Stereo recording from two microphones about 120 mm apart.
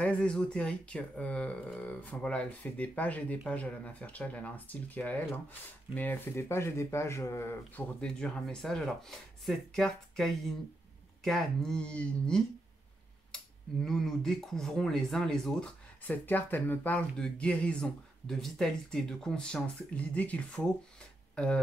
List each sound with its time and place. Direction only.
0.0 s speech: 10° left (ahead or behind)
8.0 s speech: 5° left (ahead or behind)
13.8 s speech: 5° left (ahead or behind)